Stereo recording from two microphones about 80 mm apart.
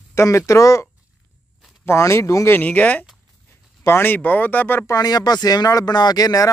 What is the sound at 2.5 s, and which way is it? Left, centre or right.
Speech, centre.